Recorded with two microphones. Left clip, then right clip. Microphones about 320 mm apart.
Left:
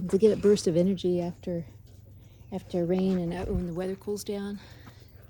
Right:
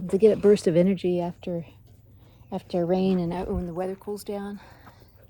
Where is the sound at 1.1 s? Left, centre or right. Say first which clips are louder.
Right 3 dB; right.